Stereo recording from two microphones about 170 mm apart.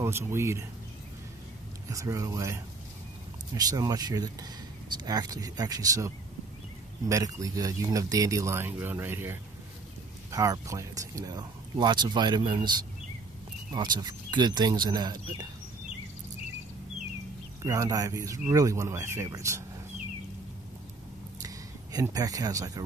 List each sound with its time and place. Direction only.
0.0 s speech: 15° right (ahead or behind)
1.9 s speech: 20° right (ahead or behind)
3.5 s speech: 20° right (ahead or behind)
13.7 s speech: 25° right (ahead or behind)
17.6 s speech: 20° right (ahead or behind)
21.9 s speech: 20° right (ahead or behind)